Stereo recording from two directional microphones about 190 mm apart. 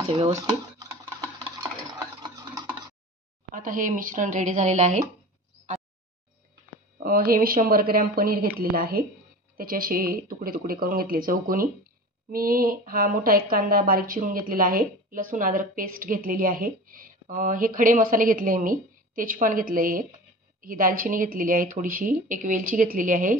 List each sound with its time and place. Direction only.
2.2 s a sound: 25° right (ahead or behind)
3.5 s a woman's voice: 45° right (ahead or behind)
7.0 s a woman's voice: 50° right (ahead or behind)